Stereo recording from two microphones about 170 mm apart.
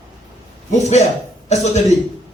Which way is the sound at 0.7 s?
40° left (ahead or behind).